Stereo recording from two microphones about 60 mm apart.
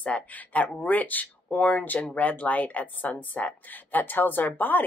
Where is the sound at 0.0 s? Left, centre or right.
Left.